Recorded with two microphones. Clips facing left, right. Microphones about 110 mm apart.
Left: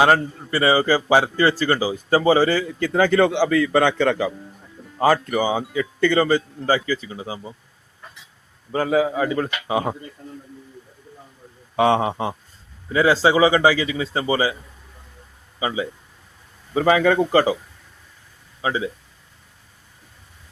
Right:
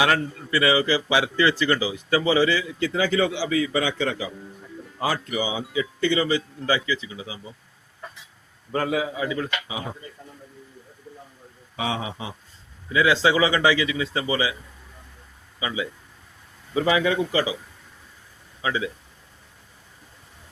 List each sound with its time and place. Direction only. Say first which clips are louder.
0.0 s speech: left 5 dB; 35° left (ahead or behind); by 4.3 s 65° left (ahead or behind)
4.9 s speech: left 8 dB; 50° left (ahead or behind)
8.9 s speech: left 6 dB; 40° left (ahead or behind); by 9.9 s 60° left (ahead or behind)
11.8 s a man's voice: left 11 dB; 55° left (ahead or behind)
12.9 s speech: left 3 dB; 35° left (ahead or behind)
15.5 s speech: left 4 dB; 35° left (ahead or behind)
16.7 s speech: left 5 dB; 50° left (ahead or behind)
18.6 s speech: left 3 dB; 30° left (ahead or behind)